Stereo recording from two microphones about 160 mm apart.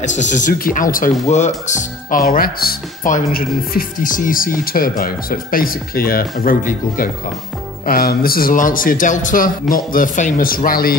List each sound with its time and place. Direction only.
0.0 s speech: 50° left (ahead or behind)
1.2 s speech: 45° left (ahead or behind); by 11.0 s 65° left (ahead or behind)